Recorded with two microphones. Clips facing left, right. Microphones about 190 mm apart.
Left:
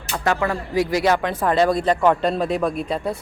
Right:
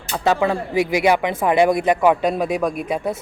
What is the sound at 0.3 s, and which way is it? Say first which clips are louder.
Speech: right 3 dB; 20° right (ahead or behind).